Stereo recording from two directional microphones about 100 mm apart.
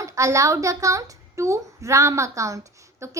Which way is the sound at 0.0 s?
30° right (ahead or behind).